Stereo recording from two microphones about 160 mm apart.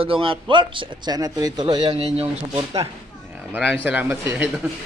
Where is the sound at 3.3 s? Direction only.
10° right (ahead or behind).